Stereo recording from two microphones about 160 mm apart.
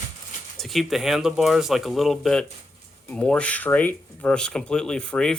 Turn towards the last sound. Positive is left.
turn(degrees=5)  # may be behind; listen again after turning